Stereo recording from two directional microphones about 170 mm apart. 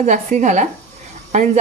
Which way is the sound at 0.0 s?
45° right (ahead or behind).